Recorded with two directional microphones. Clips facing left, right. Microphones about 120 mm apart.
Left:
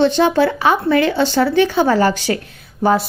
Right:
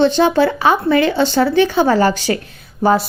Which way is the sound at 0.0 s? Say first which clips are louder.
Right 1 dB; 30° right (ahead or behind).